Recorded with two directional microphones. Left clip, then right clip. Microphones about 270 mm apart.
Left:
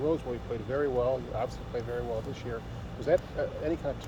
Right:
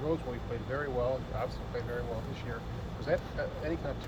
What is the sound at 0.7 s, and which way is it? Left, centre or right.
Speech, left.